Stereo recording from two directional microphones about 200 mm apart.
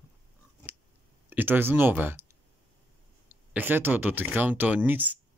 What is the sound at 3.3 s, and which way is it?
Speech, 10° right (ahead or behind).